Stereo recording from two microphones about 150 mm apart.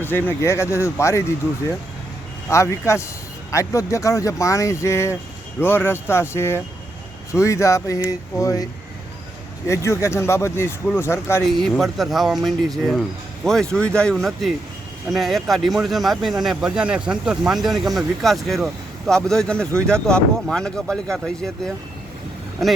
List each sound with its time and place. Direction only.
0.0 s speech: 15° left (ahead or behind)
2.5 s speech: 20° left (ahead or behind)
9.6 s speech: 20° left (ahead or behind)
11.5 s speech: centre (ahead or behind)